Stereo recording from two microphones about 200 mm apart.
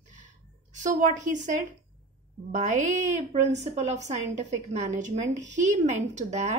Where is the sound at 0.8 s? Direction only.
40° right (ahead or behind).